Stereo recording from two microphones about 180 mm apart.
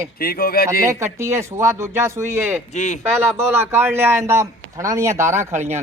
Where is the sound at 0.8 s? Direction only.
15° right (ahead or behind).